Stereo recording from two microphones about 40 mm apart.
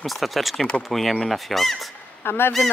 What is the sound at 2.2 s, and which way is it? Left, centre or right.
Speech, left.